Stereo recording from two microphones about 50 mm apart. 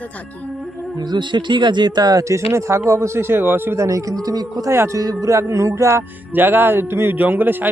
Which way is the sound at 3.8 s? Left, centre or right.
Right.